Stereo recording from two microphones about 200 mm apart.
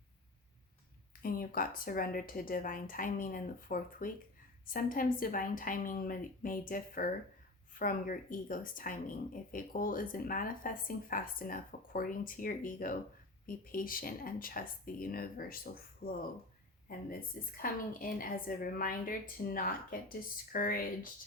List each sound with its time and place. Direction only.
1.2 s speech: 45° left (ahead or behind)